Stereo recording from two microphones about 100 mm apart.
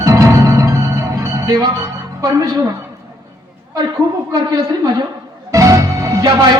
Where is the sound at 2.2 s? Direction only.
35° right (ahead or behind).